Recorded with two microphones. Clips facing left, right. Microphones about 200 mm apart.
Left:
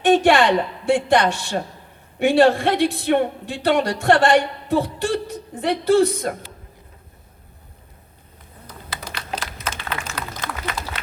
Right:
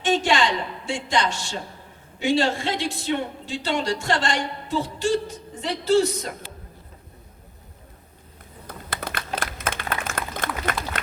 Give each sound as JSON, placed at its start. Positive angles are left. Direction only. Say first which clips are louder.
{"t": 0.0, "sound": "speech", "louder": "left 6 dB", "side_deg": 60}
{"t": 8.6, "sound": "typing", "louder": "right 3 dB", "side_deg": -55}